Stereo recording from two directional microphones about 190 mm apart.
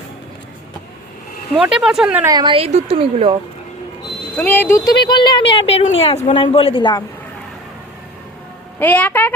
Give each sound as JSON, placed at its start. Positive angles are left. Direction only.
{"t": 1.5, "sound": "speech", "side_deg": -5}
{"t": 2.2, "sound": "a woman's voice", "side_deg": -20}
{"t": 4.4, "sound": "speech", "side_deg": 10}
{"t": 8.8, "sound": "speech", "side_deg": 10}